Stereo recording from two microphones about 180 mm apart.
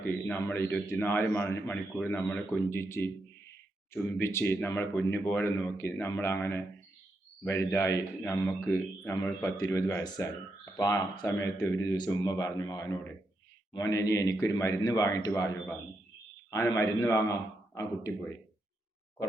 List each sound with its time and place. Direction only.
0.1 s a man's voice: 10° left (ahead or behind)